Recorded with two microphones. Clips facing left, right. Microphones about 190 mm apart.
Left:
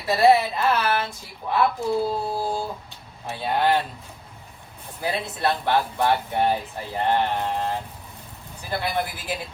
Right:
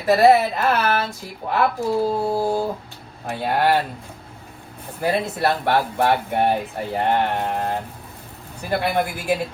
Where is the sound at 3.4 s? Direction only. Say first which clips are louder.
Right 2 dB; 55° right (ahead or behind).